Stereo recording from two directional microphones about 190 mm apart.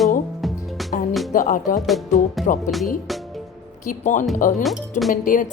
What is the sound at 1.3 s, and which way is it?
Speech, 45° left (ahead or behind).